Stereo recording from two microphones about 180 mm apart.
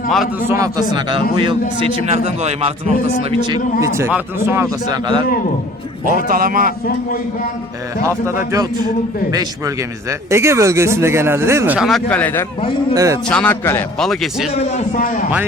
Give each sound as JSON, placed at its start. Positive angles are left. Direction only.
{"t": 0.4, "sound": "a man's voice", "side_deg": -15}
{"t": 6.2, "sound": "a man's voice", "side_deg": -50}
{"t": 8.0, "sound": "speech", "side_deg": -15}
{"t": 12.9, "sound": "a man's voice", "side_deg": -20}
{"t": 13.2, "sound": "a man's voice", "side_deg": 5}
{"t": 14.1, "sound": "a man's voice", "side_deg": 0}
{"t": 14.5, "sound": "a man's voice", "side_deg": 40}